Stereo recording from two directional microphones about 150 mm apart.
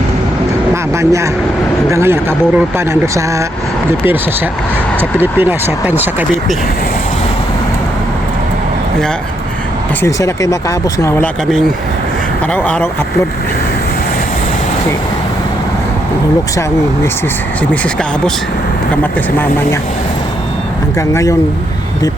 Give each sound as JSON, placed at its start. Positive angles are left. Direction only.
{"t": 0.7, "sound": "vehicle", "side_deg": -20}
{"t": 1.9, "sound": "speech", "side_deg": -20}
{"t": 5.2, "sound": "speech", "side_deg": -15}
{"t": 10.0, "sound": "speech", "side_deg": 20}
{"t": 12.5, "sound": "speech", "side_deg": 10}
{"t": 21.1, "sound": "speech", "side_deg": 20}